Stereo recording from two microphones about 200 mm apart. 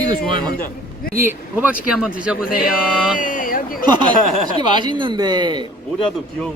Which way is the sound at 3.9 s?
20° right (ahead or behind).